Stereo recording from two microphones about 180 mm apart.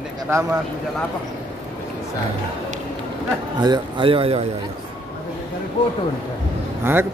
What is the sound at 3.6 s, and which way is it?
Speech, 25° right (ahead or behind).